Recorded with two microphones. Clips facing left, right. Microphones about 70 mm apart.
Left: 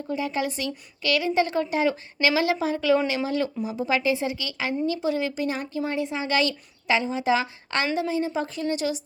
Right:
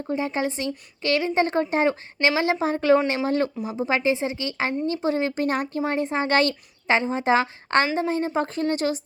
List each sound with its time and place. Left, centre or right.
0.1 s a woman's voice: right